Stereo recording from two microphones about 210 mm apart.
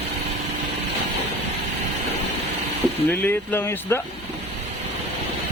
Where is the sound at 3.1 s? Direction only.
10° left (ahead or behind).